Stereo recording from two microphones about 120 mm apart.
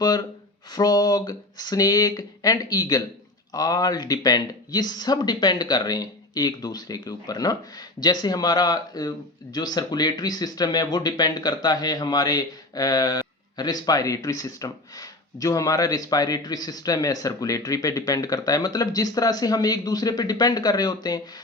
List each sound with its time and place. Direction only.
0.7 s speech: 35° left (ahead or behind)